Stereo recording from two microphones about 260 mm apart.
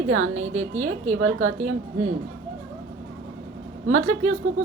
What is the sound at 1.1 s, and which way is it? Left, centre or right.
Speech, right.